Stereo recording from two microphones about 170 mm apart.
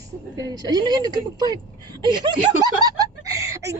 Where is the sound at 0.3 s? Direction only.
25° right (ahead or behind).